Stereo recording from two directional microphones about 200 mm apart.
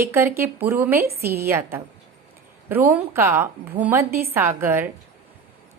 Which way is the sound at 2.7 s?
10° right (ahead or behind).